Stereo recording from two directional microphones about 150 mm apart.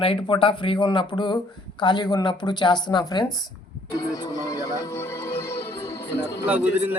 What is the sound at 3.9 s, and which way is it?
Music, 25° left (ahead or behind).